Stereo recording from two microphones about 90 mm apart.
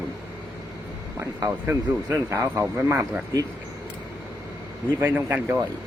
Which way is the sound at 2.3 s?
25° right (ahead or behind).